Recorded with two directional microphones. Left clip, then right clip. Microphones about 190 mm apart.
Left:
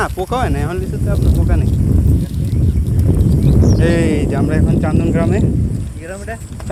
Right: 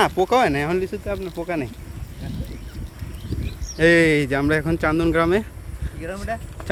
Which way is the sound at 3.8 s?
30° right (ahead or behind).